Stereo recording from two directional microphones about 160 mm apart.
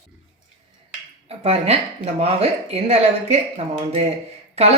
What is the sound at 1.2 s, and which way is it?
Speech, 40° right (ahead or behind).